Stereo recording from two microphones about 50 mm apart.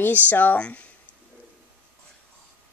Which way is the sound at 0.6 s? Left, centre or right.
Left.